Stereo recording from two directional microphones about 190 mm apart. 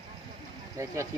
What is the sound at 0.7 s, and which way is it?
Speech, 15° right (ahead or behind).